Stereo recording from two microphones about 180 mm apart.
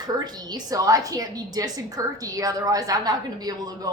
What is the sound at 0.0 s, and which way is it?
A woman's voice, 20° right (ahead or behind).